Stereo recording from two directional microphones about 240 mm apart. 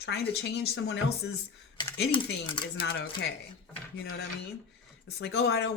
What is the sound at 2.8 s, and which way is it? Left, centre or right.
Speech, left.